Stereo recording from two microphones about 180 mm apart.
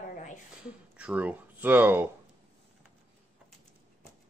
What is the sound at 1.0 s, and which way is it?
Speech, 5° right (ahead or behind).